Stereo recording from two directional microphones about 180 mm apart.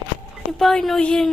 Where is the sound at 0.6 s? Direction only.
Centre (ahead or behind).